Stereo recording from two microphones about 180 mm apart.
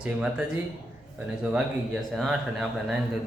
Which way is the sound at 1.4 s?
Centre (ahead or behind).